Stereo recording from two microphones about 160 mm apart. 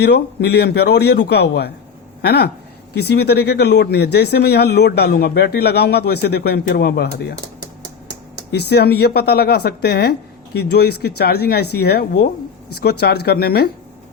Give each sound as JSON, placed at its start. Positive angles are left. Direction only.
{"t": 0.0, "sound": "speech", "side_deg": 90}
{"t": 8.5, "sound": "speech", "side_deg": 90}